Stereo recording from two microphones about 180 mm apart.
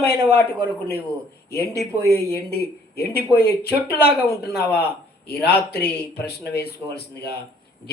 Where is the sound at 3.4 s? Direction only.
65° left (ahead or behind).